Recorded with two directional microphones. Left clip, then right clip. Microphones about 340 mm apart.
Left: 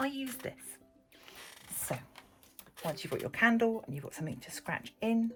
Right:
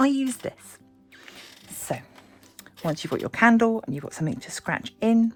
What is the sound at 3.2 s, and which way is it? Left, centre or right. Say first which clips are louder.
Speech: right 9 dB; centre.